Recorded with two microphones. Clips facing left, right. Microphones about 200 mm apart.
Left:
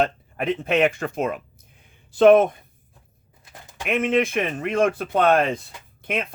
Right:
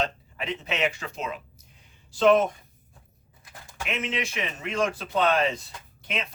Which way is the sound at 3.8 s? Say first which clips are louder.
Left 10 dB; 55° left (ahead or behind).